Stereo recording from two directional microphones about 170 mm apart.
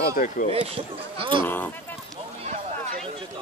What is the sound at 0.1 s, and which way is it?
Speech, 50° left (ahead or behind).